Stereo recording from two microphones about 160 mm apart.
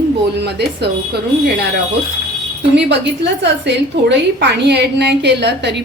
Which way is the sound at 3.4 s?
90° right.